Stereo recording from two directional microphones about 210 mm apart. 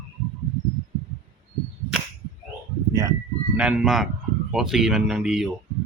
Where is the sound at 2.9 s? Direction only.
15° right (ahead or behind).